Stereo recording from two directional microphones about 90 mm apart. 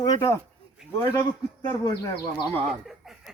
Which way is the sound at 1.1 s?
50° left (ahead or behind).